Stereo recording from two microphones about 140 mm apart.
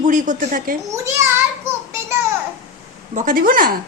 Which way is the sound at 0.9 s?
20° right (ahead or behind).